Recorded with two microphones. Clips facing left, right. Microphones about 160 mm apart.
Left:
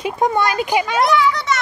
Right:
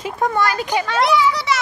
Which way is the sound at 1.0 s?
5° right (ahead or behind).